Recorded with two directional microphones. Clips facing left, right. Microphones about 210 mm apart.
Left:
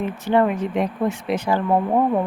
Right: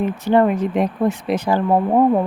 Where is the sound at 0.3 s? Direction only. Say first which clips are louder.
Right 3 dB; 40° right (ahead or behind).